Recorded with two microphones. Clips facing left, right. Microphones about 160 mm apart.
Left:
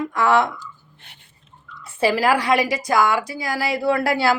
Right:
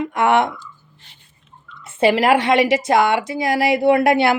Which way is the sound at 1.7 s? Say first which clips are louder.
Right 4 dB; 20° right (ahead or behind).